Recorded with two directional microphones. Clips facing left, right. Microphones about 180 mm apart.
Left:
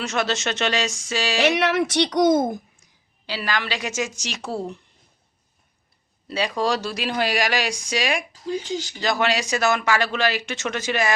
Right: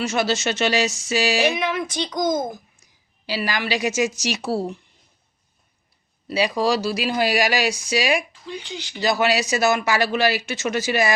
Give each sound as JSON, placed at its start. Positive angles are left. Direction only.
{"t": 0.0, "sound": "speech", "side_deg": -5}
{"t": 1.4, "sound": "a child's voice", "side_deg": 80}
{"t": 3.2, "sound": "speech", "side_deg": -10}
{"t": 6.2, "sound": "speech", "side_deg": -10}
{"t": 8.3, "sound": "speech", "side_deg": 40}
{"t": 9.0, "sound": "speech", "side_deg": -5}